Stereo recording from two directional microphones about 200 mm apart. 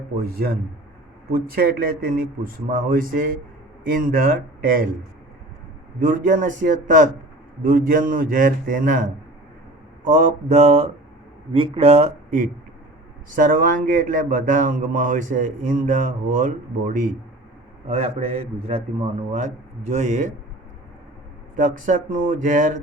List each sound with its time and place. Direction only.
1.3 s a man's voice: 45° right (ahead or behind)
6.0 s a man's voice: 40° right (ahead or behind)
21.5 s a man's voice: 40° right (ahead or behind)